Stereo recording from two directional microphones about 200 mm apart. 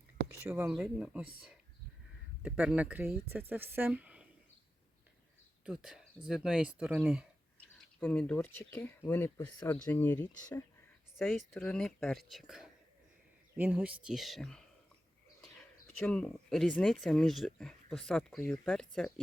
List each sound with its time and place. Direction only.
0.4 s speech: 10° right (ahead or behind)
5.6 s speech: 5° right (ahead or behind)
16.0 s speech: 5° left (ahead or behind)